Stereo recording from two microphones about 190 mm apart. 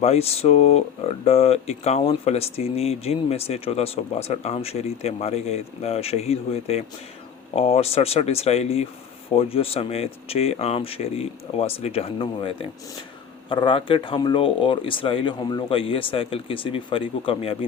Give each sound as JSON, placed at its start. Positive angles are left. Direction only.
{"t": 0.0, "sound": "speech", "side_deg": 35}